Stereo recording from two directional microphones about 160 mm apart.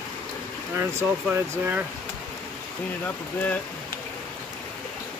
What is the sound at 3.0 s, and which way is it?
Speech, 10° left (ahead or behind).